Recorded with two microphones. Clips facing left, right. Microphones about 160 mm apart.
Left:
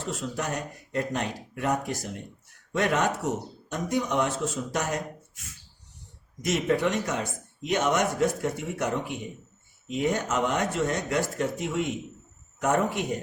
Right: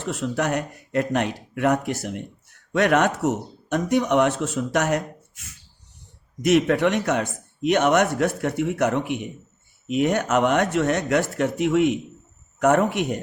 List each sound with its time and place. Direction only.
0.0 s speech: 70° right (ahead or behind)
6.4 s speech: 70° right (ahead or behind)